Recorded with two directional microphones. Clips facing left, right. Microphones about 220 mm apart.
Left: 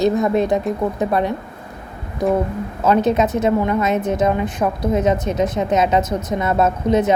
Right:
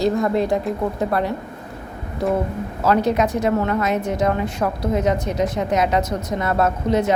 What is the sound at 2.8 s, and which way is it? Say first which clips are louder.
A woman's voice: left 2 dB; 20° left (ahead or behind).